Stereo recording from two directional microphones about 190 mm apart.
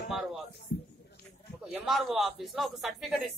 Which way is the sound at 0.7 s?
50° left (ahead or behind).